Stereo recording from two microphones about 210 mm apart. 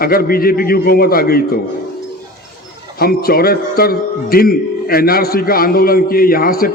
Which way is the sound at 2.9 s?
45° left (ahead or behind).